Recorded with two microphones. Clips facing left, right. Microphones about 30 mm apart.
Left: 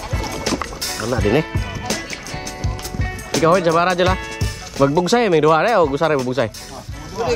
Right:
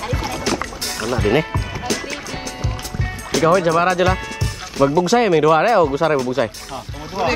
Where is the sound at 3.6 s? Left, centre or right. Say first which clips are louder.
Even; left.